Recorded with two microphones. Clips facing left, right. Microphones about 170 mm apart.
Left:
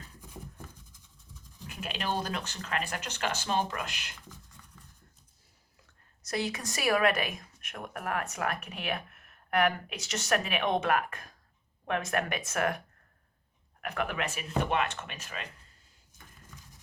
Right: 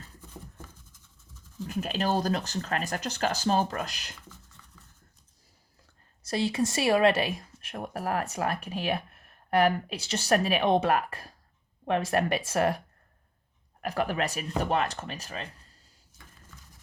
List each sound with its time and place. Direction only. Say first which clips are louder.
1.6 s speech: right 6 dB; 40° right (ahead or behind)
6.2 s speech: right 6 dB; 30° right (ahead or behind)
13.8 s speech: right 4 dB; 35° right (ahead or behind)